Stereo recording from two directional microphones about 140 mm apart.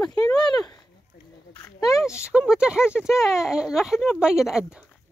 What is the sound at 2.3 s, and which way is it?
Speech, 5° right (ahead or behind).